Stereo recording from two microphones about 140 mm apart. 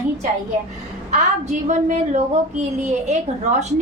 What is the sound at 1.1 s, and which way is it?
A woman's voice, 55° right (ahead or behind).